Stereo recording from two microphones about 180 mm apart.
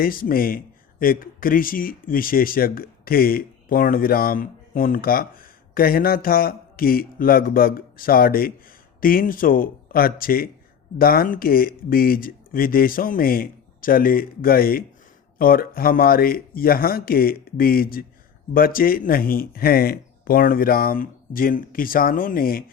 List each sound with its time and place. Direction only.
0.0 s speech: 50° left (ahead or behind)